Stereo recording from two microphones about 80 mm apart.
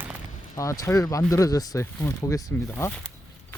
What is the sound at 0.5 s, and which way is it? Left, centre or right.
Speech, left.